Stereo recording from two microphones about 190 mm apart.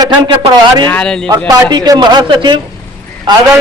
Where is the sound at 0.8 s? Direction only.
5° left (ahead or behind).